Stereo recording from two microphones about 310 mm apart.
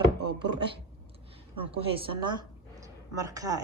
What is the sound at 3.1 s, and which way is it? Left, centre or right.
Speech, centre.